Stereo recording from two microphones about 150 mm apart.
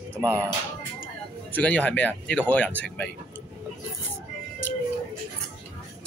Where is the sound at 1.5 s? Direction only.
10° left (ahead or behind).